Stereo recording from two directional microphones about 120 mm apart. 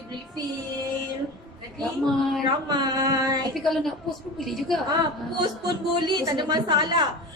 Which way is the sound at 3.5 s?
Centre (ahead or behind).